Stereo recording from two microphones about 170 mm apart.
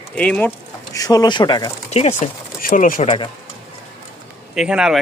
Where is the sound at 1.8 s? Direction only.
40° left (ahead or behind).